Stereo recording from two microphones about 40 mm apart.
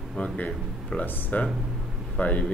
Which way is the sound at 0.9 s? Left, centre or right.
Left.